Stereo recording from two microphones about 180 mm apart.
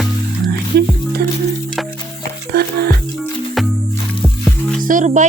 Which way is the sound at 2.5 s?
60° right (ahead or behind).